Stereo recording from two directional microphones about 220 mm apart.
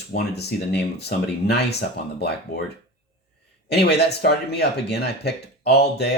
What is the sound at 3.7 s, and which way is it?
Speech, 45° left (ahead or behind).